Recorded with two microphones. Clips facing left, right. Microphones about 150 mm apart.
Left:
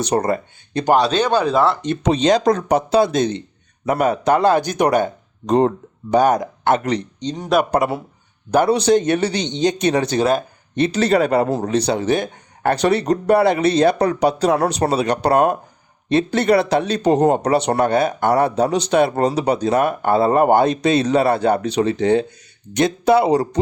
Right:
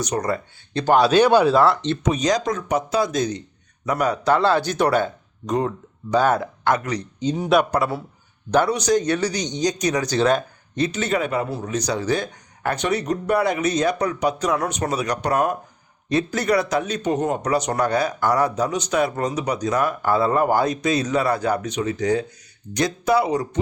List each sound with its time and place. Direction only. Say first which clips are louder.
0.3 s a man's voice: left 4 dB; 20° left (ahead or behind)
0.9 s speech: right 3 dB; 5° right (ahead or behind)
1.5 s speech: even; centre (ahead or behind)
2.0 s a man's voice: left 7 dB; 30° left (ahead or behind)
5.5 s speech: left 7 dB; 35° left (ahead or behind)
6.1 s speech: left 4 dB; 15° left (ahead or behind)
7.2 s speech: right 2 dB; 5° right (ahead or behind)
7.7 s a man's voice: left 4 dB; 20° left (ahead or behind)
10.2 s speech: right 2 dB; 10° left (ahead or behind)
10.8 s a man's voice: left 6 dB; 30° left (ahead or behind)
12.7 s a man's voice: left 6 dB; 35° left (ahead or behind)